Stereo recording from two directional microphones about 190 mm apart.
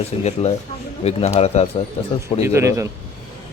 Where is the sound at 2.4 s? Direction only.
15° right (ahead or behind).